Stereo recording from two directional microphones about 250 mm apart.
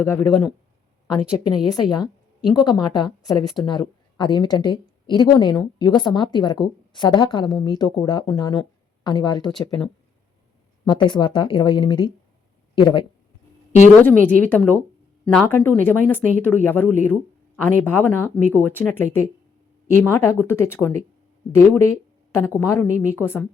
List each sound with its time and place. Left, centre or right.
0.0 s a woman's voice: centre
1.6 s a woman's voice: centre
9.6 s speech: centre
10.8 s speech: centre
14.0 s a woman's voice: centre